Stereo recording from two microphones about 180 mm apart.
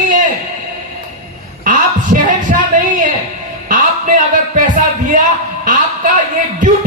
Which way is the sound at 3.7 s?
45° right (ahead or behind).